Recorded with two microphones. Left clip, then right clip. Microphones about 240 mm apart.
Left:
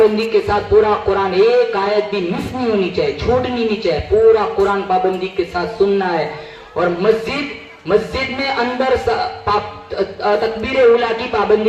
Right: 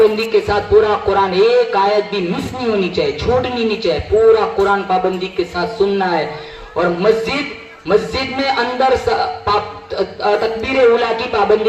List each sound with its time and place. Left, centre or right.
0.0 s a man's voice: right
5.5 s music: right